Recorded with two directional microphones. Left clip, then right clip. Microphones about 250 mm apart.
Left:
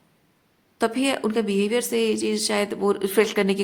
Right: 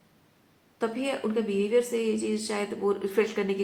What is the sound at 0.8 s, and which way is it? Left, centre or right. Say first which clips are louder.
A woman's voice: left 6 dB; left.